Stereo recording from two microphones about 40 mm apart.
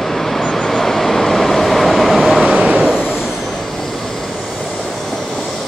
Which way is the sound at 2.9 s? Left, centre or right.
Centre.